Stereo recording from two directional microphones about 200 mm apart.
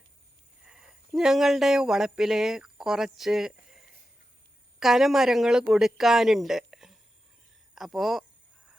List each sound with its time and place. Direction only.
0.6 s speech: 5° right (ahead or behind)